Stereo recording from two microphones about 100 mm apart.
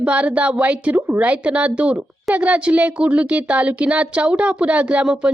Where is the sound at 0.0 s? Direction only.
10° right (ahead or behind).